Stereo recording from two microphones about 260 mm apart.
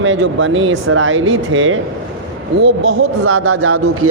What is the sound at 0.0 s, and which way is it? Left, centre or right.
Speech, right.